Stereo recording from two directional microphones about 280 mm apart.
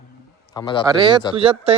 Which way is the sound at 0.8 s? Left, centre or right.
Centre.